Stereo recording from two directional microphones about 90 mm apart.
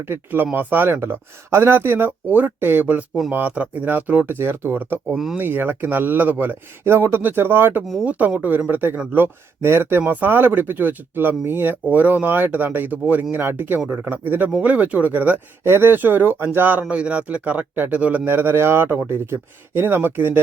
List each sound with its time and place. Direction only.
0.1 s speech: 20° right (ahead or behind)
5.1 s speech: 5° right (ahead or behind)
5.4 s speech: 20° right (ahead or behind)